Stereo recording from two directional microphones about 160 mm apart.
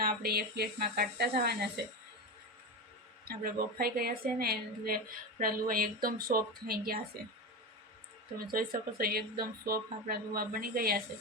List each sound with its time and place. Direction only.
0.0 s speech: 70° right (ahead or behind); by 1.8 s 90° right
3.2 s a woman's voice: 70° right (ahead or behind)
8.5 s speech: 65° right (ahead or behind)